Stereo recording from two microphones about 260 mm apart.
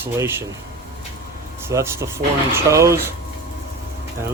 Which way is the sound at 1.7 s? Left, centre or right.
Centre.